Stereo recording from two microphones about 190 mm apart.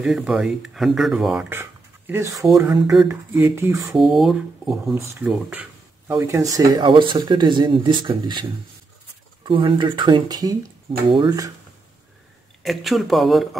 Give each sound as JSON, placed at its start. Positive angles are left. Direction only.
{"t": 0.0, "sound": "speech", "side_deg": -5}
{"t": 3.9, "sound": "speech", "side_deg": 0}
{"t": 12.6, "sound": "speech", "side_deg": 0}